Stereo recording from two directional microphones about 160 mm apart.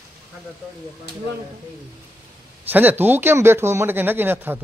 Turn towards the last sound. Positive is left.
turn(degrees=-15)  # may be behind; listen again after turning